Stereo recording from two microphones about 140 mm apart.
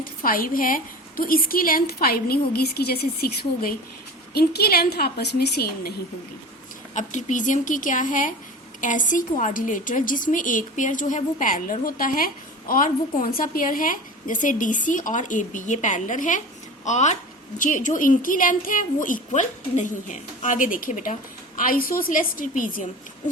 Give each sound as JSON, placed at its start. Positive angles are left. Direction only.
{"t": 0.0, "sound": "a woman's voice", "side_deg": 90}
{"t": 6.9, "sound": "a woman's voice", "side_deg": 60}
{"t": 21.6, "sound": "a woman's voice", "side_deg": 90}